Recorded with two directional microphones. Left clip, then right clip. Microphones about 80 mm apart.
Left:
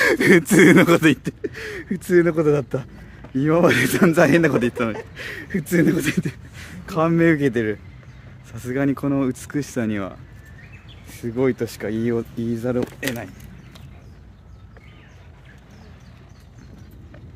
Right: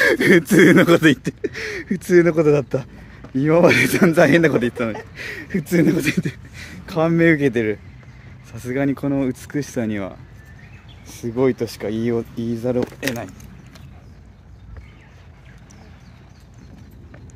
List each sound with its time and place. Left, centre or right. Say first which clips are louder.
0.0 s speech: right 1 dB; centre
1.2 s speech: right 3 dB; right; by 2.9 s centre
3.3 s speech: right 3 dB; centre
4.0 s speech: even; centre
4.6 s speech: right 1 dB; left
5.1 s speech: right 1 dB; centre
6.9 s speech: right 2 dB; centre
8.7 s speech: right 1 dB; left
11.1 s speech: right 2 dB; centre